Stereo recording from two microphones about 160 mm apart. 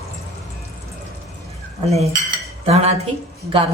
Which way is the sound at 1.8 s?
40° right (ahead or behind).